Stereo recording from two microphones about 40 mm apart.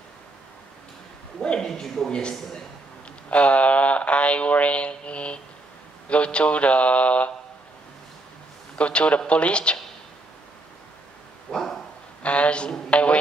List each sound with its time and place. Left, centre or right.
1.4 s speech: left
3.3 s a sound: left
6.0 s speech: left
8.7 s speech: left
11.5 s dog: centre
12.2 s a sound: left
12.9 s a woman's voice: left